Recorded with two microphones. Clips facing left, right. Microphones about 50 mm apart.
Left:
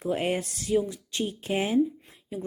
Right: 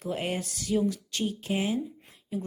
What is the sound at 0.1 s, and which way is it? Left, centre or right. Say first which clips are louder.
Speech: left 4 dB; left.